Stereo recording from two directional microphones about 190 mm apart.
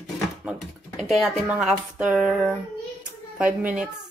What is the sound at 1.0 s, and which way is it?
A child's voice, centre (ahead or behind).